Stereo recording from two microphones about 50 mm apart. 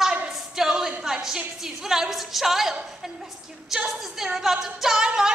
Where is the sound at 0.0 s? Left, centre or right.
Centre.